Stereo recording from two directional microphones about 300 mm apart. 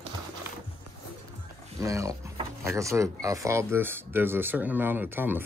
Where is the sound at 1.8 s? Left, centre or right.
Centre.